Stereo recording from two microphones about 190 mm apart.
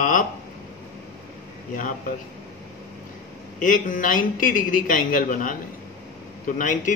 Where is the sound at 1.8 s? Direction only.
45° left (ahead or behind).